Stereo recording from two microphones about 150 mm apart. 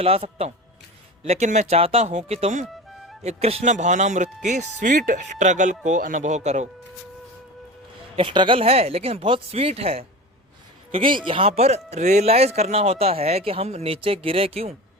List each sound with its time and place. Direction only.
0.0 s speech: 40° right (ahead or behind)
8.1 s speech: 35° right (ahead or behind)